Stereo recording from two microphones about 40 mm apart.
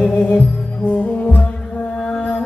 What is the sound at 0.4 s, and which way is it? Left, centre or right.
Music, left.